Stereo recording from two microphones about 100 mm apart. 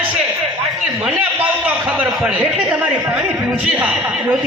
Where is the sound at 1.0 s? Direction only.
15° right (ahead or behind).